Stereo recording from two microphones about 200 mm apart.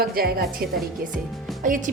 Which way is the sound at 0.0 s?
50° right (ahead or behind).